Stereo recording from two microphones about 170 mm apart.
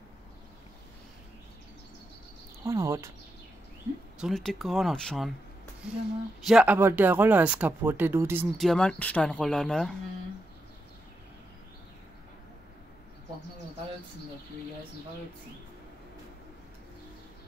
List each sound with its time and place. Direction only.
2.6 s speech: 20° right (ahead or behind)
4.2 s speech: centre (ahead or behind); by 8.5 s 15° right (ahead or behind)
8.5 s speech: 5° left (ahead or behind)